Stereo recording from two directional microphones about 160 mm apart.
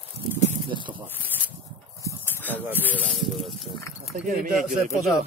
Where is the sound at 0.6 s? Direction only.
30° right (ahead or behind).